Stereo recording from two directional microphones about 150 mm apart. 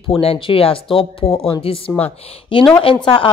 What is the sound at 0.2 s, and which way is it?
Speech, 40° left (ahead or behind).